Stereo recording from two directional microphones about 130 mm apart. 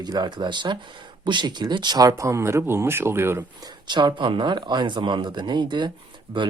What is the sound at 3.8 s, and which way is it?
Speech, 35° right (ahead or behind).